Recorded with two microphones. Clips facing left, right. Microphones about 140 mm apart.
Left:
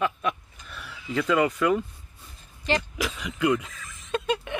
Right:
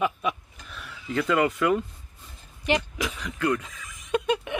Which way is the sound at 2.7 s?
15° right (ahead or behind).